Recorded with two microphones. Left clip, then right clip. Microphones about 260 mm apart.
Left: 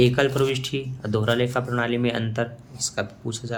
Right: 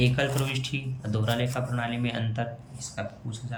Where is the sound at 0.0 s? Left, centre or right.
Centre.